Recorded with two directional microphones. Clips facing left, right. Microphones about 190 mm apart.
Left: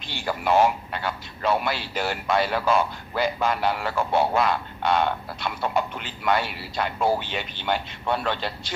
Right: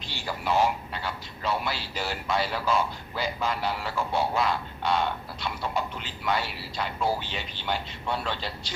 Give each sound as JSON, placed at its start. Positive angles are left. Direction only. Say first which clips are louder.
{"t": 0.1, "sound": "speech", "louder": "left 5 dB", "side_deg": 55}